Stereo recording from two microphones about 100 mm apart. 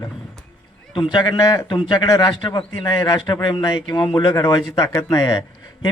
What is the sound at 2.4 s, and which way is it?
A man's voice, 50° left (ahead or behind).